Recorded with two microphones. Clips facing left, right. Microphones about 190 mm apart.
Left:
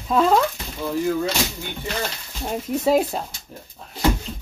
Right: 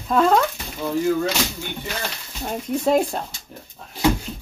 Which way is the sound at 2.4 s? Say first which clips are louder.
Even; 5° left (ahead or behind).